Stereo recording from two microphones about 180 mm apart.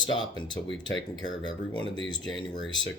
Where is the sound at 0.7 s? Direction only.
90° left.